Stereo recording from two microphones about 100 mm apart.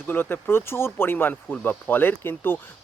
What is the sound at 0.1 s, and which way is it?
Speech, 20° left (ahead or behind).